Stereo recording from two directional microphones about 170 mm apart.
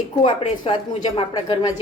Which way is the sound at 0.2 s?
30° left (ahead or behind).